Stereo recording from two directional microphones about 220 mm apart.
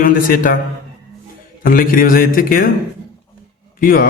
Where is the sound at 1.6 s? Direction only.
40° left (ahead or behind).